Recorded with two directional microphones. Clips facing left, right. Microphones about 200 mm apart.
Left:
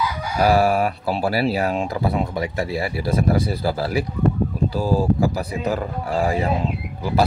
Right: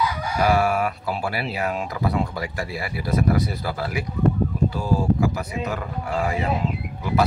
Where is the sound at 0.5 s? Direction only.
35° left (ahead or behind).